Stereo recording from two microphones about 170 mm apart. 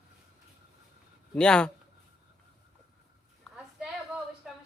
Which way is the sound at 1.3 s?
5° left (ahead or behind).